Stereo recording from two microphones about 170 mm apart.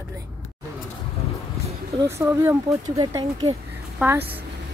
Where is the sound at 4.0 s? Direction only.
5° right (ahead or behind).